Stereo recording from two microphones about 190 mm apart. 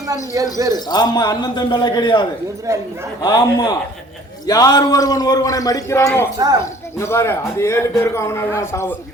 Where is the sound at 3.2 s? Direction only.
20° left (ahead or behind).